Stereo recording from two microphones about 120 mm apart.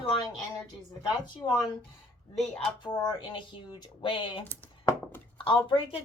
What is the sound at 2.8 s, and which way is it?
Speech, 35° left (ahead or behind).